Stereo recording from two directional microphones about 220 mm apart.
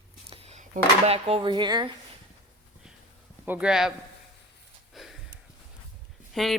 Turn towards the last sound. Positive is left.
turn(degrees=0)  # may be behind; listen again after turning